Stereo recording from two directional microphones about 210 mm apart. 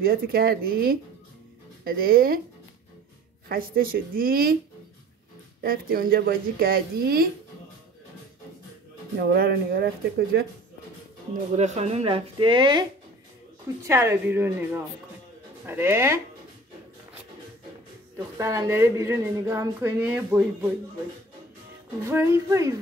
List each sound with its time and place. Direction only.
0.0 s a woman's voice: 45° right (ahead or behind)
3.4 s a woman's voice: 45° right (ahead or behind)
5.6 s a woman's voice: 45° right (ahead or behind)
9.2 s a woman's voice: 50° right (ahead or behind)
11.5 s speech: 30° right (ahead or behind)
13.8 s speech: 15° right (ahead or behind)
18.1 s speech: 15° right (ahead or behind)
22.1 s speech: 15° right (ahead or behind)